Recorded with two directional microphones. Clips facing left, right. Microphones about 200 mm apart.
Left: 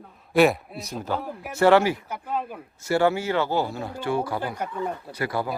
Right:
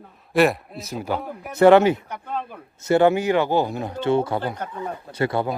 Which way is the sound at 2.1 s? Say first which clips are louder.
Left 1 dB; 5° left (ahead or behind).